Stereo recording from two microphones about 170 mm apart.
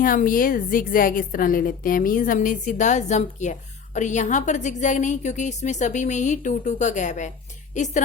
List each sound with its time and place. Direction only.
0.0 s a woman's voice: 55° left (ahead or behind)